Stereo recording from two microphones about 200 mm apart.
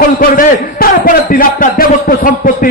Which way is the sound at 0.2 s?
45° left (ahead or behind).